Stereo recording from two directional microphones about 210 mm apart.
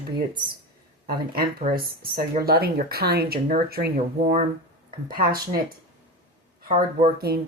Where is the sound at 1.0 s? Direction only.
45° right (ahead or behind).